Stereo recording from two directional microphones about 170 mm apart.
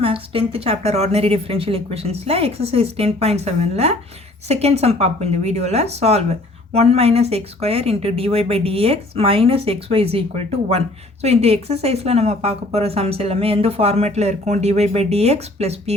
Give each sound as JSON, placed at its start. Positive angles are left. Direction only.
{"t": 0.0, "sound": "speech", "side_deg": -35}